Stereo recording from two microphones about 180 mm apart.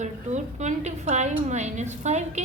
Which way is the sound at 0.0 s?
40° right (ahead or behind).